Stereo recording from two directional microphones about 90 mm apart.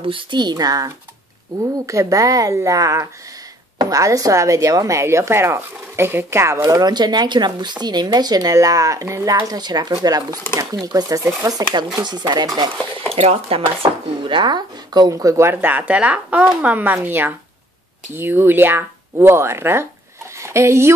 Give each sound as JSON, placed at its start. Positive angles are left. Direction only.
{"t": 0.0, "sound": "a woman's voice", "side_deg": -65}
{"t": 13.1, "sound": "chopping", "side_deg": -90}
{"t": 20.3, "sound": "speech", "side_deg": -30}